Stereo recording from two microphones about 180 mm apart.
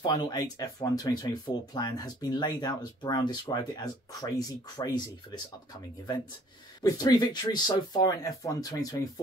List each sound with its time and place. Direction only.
0.0 s speech: 20° left (ahead or behind)
6.8 s speech: 20° left (ahead or behind)